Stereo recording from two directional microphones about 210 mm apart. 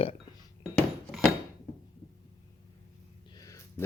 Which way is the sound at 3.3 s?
15° left (ahead or behind).